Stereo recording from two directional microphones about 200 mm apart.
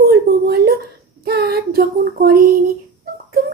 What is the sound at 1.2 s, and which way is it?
Child singing, 55° right (ahead or behind).